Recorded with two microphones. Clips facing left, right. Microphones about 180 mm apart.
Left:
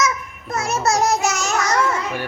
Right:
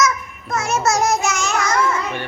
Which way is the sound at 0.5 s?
35° left (ahead or behind).